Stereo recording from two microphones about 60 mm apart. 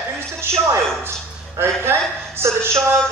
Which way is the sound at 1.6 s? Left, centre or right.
Right.